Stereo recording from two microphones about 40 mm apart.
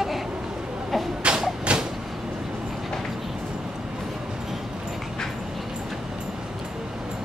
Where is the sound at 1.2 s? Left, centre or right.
Right.